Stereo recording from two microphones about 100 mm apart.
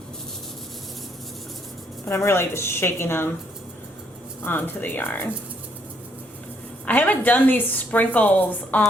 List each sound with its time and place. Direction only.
2.0 s a woman's voice: 25° left (ahead or behind)
4.4 s a woman's voice: 20° left (ahead or behind)
6.8 s a woman's voice: 15° left (ahead or behind)